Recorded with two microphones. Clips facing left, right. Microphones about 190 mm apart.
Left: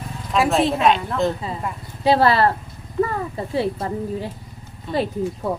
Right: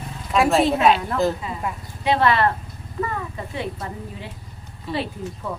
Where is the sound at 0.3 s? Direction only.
Centre (ahead or behind).